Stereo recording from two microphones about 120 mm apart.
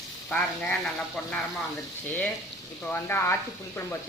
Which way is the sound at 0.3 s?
10° left (ahead or behind).